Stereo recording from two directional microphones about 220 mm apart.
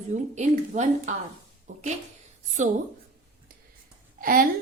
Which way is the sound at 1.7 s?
35° right (ahead or behind).